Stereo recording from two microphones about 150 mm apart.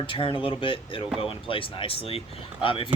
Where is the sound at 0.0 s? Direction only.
35° left (ahead or behind).